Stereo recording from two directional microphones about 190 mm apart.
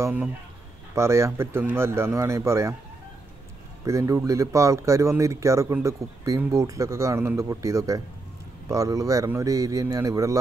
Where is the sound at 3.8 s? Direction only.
15° right (ahead or behind).